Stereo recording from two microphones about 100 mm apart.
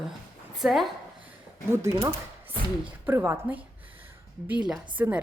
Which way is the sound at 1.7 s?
30° right (ahead or behind).